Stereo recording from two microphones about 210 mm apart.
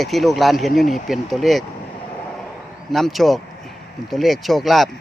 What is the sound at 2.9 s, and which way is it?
Speech, centre (ahead or behind).